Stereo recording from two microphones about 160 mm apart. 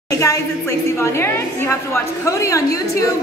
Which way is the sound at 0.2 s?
15° left (ahead or behind).